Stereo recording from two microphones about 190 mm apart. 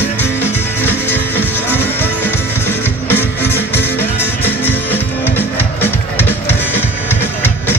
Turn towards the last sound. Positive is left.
turn(degrees=10)  # may be behind; listen again after turning